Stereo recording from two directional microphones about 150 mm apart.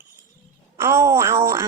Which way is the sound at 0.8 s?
15° right (ahead or behind).